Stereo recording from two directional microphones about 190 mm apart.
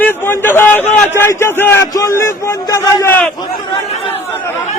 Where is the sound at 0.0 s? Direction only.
10° left (ahead or behind).